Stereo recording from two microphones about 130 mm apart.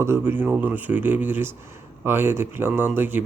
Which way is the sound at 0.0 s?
20° right (ahead or behind).